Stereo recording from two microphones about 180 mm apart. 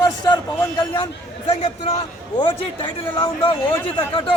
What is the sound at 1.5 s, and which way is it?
Speech, 35° left (ahead or behind).